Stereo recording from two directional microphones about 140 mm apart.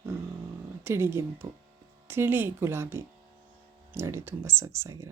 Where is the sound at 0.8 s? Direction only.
15° right (ahead or behind).